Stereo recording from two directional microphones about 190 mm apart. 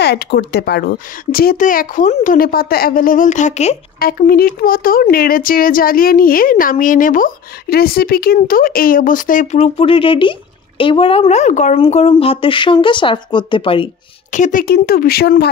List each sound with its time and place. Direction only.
0.0 s speech: 60° left (ahead or behind); by 3.7 s 40° left (ahead or behind)
4.0 s speech: 55° left (ahead or behind); by 13.8 s 25° left (ahead or behind)
14.3 s speech: 45° left (ahead or behind)